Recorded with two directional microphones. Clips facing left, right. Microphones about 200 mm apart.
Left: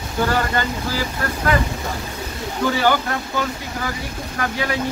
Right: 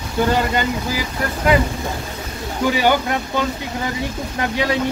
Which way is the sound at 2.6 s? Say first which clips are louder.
Right 2 dB; 15° right (ahead or behind).